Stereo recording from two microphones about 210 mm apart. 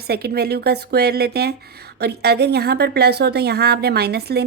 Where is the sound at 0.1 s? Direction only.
50° right (ahead or behind).